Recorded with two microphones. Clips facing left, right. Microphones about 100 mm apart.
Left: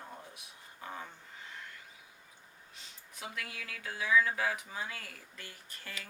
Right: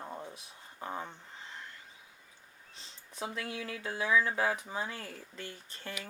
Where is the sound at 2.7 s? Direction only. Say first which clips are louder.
Right 2 dB; 30° right (ahead or behind).